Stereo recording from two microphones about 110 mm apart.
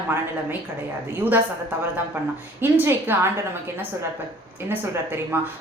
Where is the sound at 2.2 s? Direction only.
20° right (ahead or behind).